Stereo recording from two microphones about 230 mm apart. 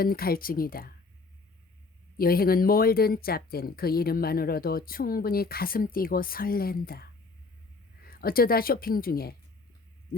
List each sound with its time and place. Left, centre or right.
0.0 s speech: left
2.1 s speech: left